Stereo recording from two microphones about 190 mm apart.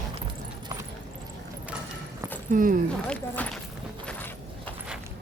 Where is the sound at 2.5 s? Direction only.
45° right (ahead or behind).